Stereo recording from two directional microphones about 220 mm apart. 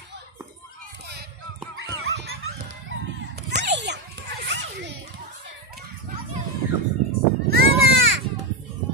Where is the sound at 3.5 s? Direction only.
50° right (ahead or behind).